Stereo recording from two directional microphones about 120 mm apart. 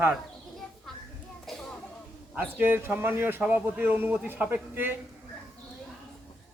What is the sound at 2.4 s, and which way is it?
A man's voice, 15° right (ahead or behind).